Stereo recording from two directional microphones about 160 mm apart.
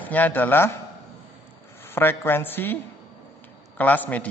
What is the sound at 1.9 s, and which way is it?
Speech, 15° left (ahead or behind).